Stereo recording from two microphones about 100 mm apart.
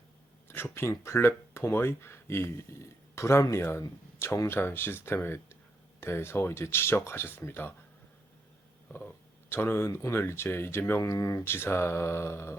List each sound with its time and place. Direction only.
0.4 s speech: 25° left (ahead or behind)
9.5 s speech: 20° left (ahead or behind)